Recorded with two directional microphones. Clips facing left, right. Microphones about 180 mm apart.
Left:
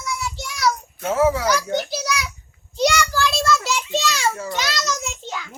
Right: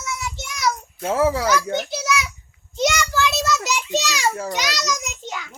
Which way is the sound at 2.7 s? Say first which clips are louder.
Left 1 dB; 20° right (ahead or behind).